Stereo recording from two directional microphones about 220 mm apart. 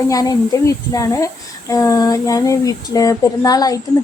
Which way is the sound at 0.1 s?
15° left (ahead or behind).